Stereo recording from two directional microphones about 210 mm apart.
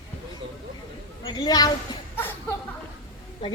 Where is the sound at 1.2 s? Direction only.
20° left (ahead or behind).